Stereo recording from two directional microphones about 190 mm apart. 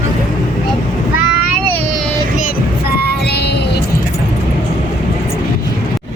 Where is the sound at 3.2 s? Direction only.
60° left (ahead or behind).